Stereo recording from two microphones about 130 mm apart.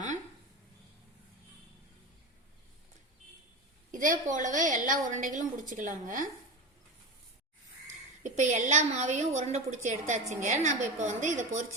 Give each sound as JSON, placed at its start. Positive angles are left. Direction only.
{"t": 3.9, "sound": "a woman's voice", "side_deg": -90}
{"t": 8.2, "sound": "a woman's voice", "side_deg": -70}